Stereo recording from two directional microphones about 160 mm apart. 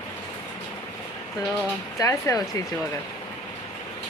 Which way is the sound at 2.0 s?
20° left (ahead or behind).